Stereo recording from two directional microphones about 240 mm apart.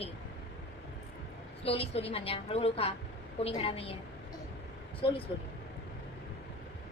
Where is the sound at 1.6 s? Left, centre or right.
Left.